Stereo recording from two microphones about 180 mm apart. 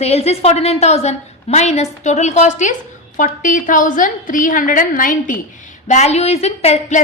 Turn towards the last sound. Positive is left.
turn(degrees=40)  # may be behind; listen again after turning